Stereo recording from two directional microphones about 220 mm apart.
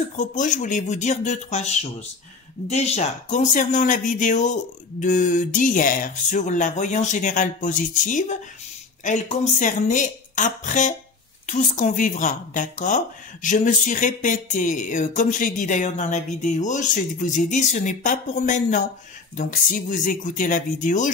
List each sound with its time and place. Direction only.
0.1 s a woman's voice: 35° left (ahead or behind)